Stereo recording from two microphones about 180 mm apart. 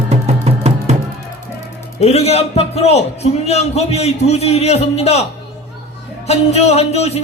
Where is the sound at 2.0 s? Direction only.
35° left (ahead or behind).